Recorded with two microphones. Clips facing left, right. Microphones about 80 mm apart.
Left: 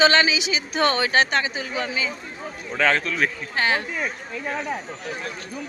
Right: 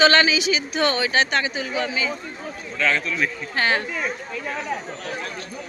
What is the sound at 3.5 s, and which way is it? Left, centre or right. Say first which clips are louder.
Speech: right 1 dB; centre.